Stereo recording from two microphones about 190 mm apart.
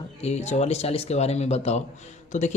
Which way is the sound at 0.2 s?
35° left (ahead or behind).